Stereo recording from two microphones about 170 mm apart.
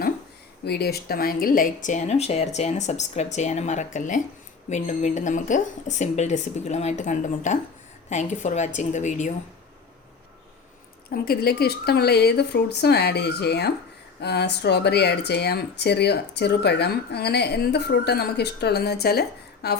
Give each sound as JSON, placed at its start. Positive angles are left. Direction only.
{"t": 0.6, "sound": "speech", "side_deg": 70}
{"t": 11.1, "sound": "speech", "side_deg": 65}